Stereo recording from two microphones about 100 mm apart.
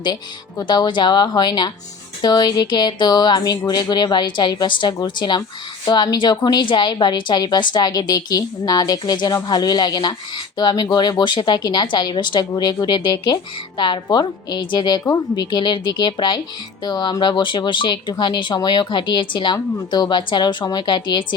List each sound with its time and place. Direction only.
0.7 s a woman's voice: 50° left (ahead or behind)